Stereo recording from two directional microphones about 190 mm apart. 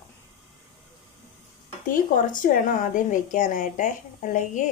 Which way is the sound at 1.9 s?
45° left (ahead or behind).